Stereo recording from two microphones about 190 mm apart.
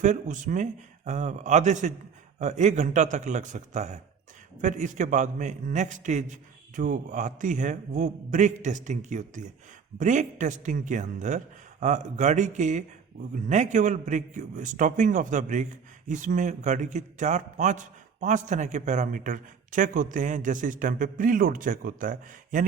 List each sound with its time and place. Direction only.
0.0 s a man's voice: 40° right (ahead or behind)